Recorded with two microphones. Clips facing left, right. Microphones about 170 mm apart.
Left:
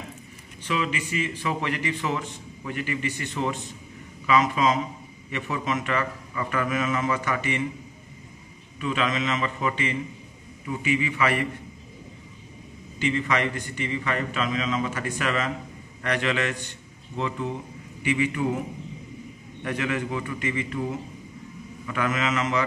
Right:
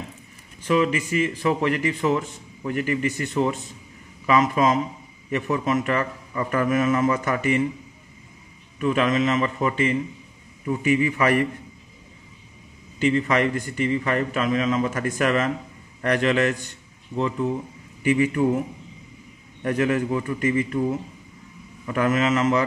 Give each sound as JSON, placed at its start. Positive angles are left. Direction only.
{"t": 0.7, "sound": "a man's voice", "side_deg": -40}
{"t": 4.3, "sound": "a man's voice", "side_deg": -45}
{"t": 8.7, "sound": "a man's voice", "side_deg": -45}
{"t": 13.0, "sound": "a man's voice", "side_deg": -40}
{"t": 18.0, "sound": "a man's voice", "side_deg": -40}
{"t": 19.6, "sound": "a man's voice", "side_deg": -40}
{"t": 21.8, "sound": "a man's voice", "side_deg": -40}